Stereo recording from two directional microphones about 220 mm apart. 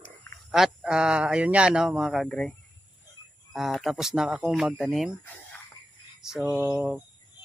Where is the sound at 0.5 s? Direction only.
Centre (ahead or behind).